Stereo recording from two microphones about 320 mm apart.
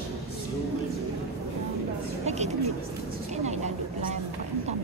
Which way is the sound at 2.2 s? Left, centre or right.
Right.